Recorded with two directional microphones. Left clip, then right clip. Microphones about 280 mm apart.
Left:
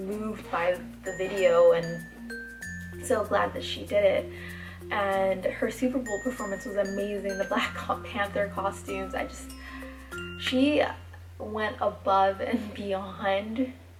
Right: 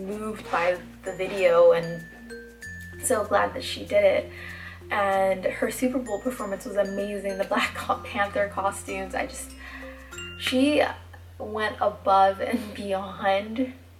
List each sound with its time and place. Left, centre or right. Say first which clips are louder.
0.2 s speech: right 5 dB; centre
3.3 s speech: right 3 dB; centre
10.4 s speech: right 3 dB; centre